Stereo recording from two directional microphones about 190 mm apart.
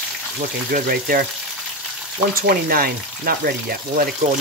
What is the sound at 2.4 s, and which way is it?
Speech, 50° right (ahead or behind).